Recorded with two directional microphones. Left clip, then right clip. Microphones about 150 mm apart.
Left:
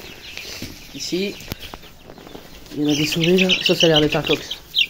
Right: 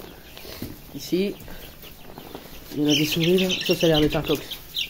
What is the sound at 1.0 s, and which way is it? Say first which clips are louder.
Speech: left 1 dB; 20° right (ahead or behind).